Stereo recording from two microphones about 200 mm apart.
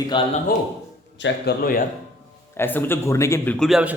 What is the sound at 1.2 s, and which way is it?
Speech, 50° left (ahead or behind).